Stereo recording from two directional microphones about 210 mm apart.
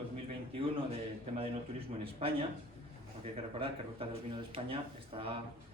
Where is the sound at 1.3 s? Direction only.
25° right (ahead or behind).